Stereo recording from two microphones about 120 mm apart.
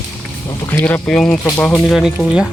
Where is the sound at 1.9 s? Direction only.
5° right (ahead or behind).